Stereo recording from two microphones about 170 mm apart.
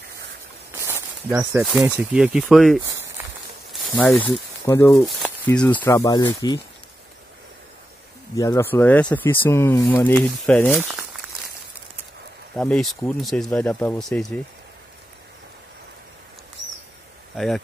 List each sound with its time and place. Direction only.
0.7 s snake: 15° right (ahead or behind)
1.6 s speech: 5° right (ahead or behind)
2.8 s a sound: 15° right (ahead or behind)
3.7 s speech: 5° left (ahead or behind)
4.6 s speech: 15° left (ahead or behind)
8.4 s speech: 15° left (ahead or behind)
12.5 s speech: 5° left (ahead or behind)